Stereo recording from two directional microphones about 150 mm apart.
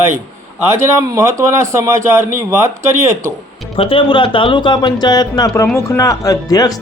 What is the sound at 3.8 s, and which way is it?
Speech, 35° left (ahead or behind).